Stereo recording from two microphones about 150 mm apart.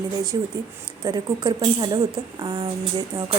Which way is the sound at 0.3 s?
25° right (ahead or behind).